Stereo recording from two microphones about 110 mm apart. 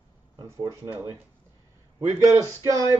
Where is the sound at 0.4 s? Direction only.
30° right (ahead or behind).